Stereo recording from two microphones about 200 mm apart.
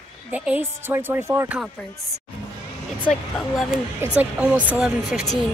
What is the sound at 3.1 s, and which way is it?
Speech, 5° left (ahead or behind).